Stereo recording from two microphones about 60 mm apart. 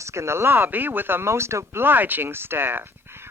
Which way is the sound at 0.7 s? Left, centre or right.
Right.